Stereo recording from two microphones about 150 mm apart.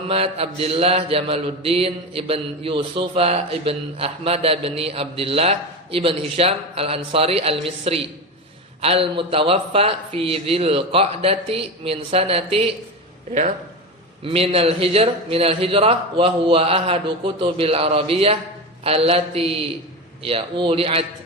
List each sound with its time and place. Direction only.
0.1 s mantra: 40° right (ahead or behind)
14.3 s mantra: 40° right (ahead or behind)